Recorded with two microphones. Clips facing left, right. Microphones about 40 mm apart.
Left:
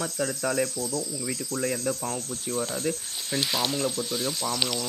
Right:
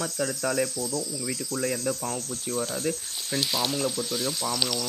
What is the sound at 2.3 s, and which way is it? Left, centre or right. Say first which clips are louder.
Cricket: even; centre.